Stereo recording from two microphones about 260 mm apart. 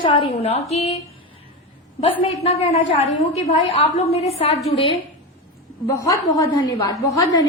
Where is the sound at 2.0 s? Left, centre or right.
Left.